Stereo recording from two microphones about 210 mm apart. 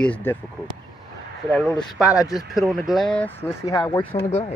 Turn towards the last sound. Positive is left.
turn(degrees=15)  # may be behind; listen again after turning